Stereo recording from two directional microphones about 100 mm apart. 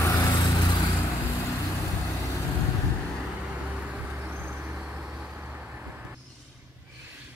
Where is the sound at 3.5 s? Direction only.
15° right (ahead or behind).